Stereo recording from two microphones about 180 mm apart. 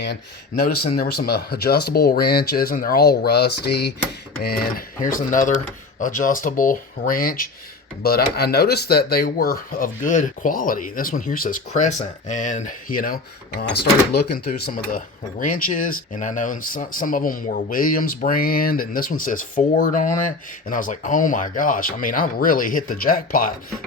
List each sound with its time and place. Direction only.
0.6 s speech: 60° left (ahead or behind)
4.4 s speech: 55° left (ahead or behind)
14.1 s speech: 65° left (ahead or behind)